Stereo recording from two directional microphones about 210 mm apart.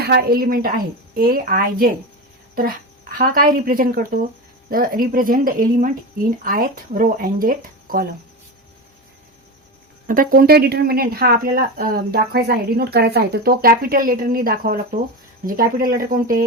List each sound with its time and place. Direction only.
0.0 s speech: 50° right (ahead or behind)
10.1 s speech: 40° right (ahead or behind)